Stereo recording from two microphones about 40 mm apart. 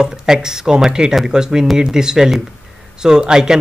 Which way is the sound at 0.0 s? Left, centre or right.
Centre.